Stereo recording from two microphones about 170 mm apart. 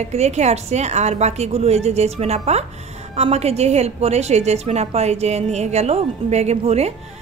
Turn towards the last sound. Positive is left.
turn(degrees=-40)  # may be behind; listen again after turning